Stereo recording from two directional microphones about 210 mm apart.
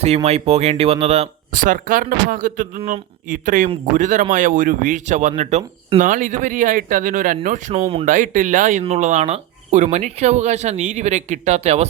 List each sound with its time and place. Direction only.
0.0 s speech: 30° right (ahead or behind)
8.0 s speech: 40° right (ahead or behind)